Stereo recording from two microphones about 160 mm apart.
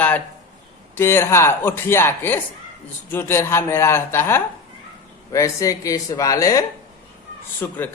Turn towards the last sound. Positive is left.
turn(degrees=15)  # may be behind; listen again after turning